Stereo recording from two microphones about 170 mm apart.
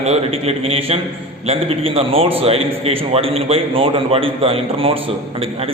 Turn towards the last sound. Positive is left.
turn(degrees=-35)  # may be behind; listen again after turning